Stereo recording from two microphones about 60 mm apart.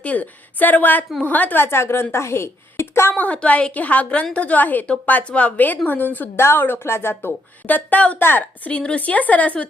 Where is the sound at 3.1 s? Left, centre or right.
Left.